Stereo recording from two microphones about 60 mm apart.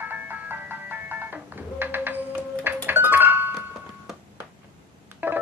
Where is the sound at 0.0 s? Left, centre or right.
Right.